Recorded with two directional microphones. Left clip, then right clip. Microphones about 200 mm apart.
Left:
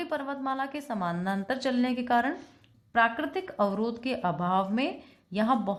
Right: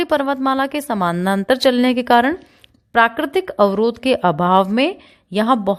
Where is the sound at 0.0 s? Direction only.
55° right (ahead or behind).